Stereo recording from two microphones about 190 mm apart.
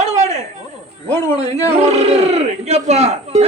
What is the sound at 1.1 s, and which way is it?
Speech, 15° left (ahead or behind).